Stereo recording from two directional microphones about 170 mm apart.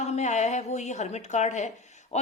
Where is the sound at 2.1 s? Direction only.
40° left (ahead or behind).